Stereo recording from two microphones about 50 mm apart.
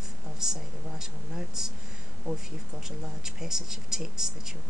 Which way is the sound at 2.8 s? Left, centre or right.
Centre.